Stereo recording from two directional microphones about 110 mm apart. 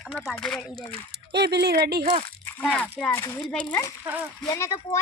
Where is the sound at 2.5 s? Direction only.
10° left (ahead or behind).